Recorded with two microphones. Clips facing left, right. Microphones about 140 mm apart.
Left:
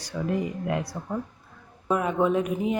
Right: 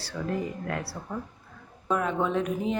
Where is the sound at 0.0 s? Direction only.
15° left (ahead or behind).